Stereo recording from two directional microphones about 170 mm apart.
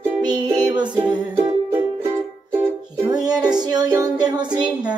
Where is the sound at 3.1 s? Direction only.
25° right (ahead or behind).